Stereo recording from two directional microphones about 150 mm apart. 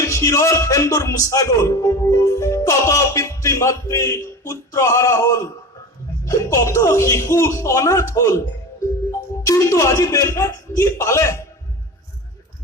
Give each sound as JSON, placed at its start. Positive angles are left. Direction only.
{"t": 0.0, "sound": "speech", "side_deg": 20}